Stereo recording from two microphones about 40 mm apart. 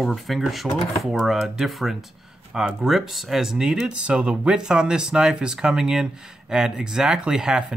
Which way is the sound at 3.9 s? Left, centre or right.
Right.